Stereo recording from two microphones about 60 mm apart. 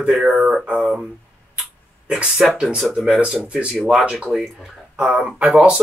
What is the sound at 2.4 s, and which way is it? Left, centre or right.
Speech, centre.